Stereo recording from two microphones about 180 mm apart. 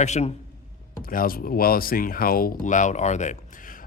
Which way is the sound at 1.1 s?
50° left (ahead or behind).